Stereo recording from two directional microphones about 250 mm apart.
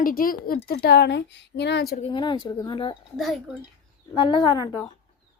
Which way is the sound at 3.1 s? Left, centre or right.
Centre.